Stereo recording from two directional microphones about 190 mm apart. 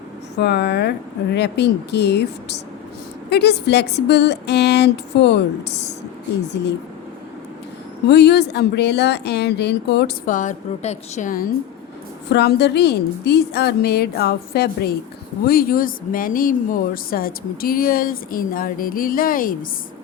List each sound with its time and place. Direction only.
0.3 s a woman's voice: 60° left (ahead or behind)
8.0 s a woman's voice: 60° left (ahead or behind)
10.2 s a woman's voice: 40° left (ahead or behind)
12.3 s a woman's voice: 60° left (ahead or behind)